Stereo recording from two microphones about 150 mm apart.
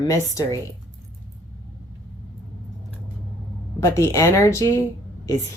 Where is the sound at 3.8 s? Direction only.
20° left (ahead or behind).